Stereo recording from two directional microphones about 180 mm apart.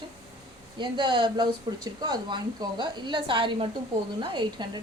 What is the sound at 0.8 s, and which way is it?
Speech, 25° right (ahead or behind).